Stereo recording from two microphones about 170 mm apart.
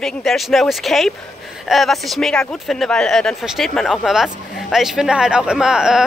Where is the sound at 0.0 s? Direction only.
Centre (ahead or behind).